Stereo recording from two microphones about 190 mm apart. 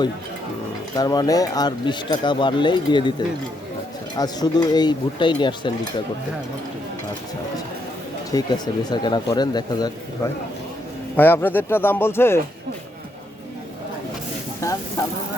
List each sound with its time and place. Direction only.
0.9 s speech: 20° left (ahead or behind)
8.3 s speech: 20° left (ahead or behind)
11.2 s speech: 10° left (ahead or behind)
14.6 s speech: 15° left (ahead or behind)